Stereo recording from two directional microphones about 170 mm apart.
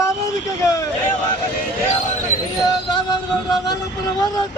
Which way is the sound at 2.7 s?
25° left (ahead or behind).